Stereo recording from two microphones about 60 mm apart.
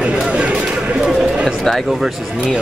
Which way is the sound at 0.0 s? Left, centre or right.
Centre.